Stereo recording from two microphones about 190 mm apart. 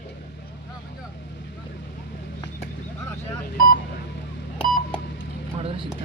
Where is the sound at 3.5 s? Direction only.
45° left (ahead or behind).